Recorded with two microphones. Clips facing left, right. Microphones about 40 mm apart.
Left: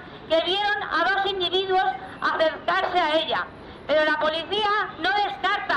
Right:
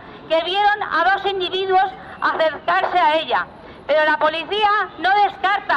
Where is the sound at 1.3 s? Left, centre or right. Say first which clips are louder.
Right 4 dB; centre.